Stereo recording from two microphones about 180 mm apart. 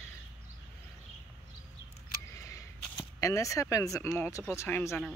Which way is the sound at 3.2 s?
15° left (ahead or behind).